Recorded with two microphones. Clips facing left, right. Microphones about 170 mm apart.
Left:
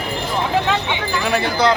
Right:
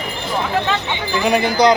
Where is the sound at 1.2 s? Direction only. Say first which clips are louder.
Right 4 dB; 15° right (ahead or behind).